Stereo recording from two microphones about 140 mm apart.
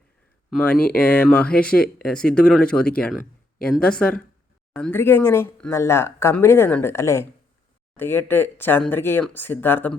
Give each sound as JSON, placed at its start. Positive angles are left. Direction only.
{"t": 0.5, "sound": "speech", "side_deg": 10}